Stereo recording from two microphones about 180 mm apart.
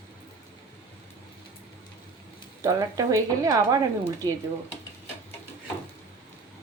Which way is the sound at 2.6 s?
20° right (ahead or behind).